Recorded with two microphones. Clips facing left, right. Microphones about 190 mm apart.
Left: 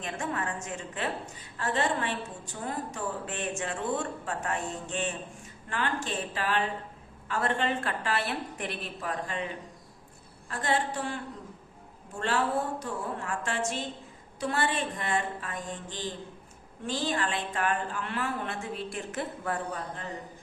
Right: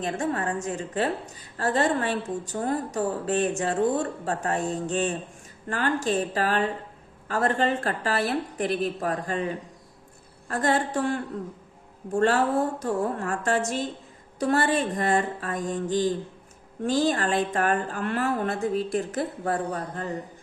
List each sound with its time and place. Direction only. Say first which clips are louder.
0.0 s a woman's voice: right 6 dB; 35° right (ahead or behind)
10.5 s a woman's voice: right 5 dB; 45° right (ahead or behind)
12.8 s a woman's voice: right 8 dB; 45° right (ahead or behind)